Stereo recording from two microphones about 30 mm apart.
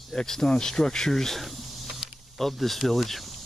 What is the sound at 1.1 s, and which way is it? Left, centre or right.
Speech, centre.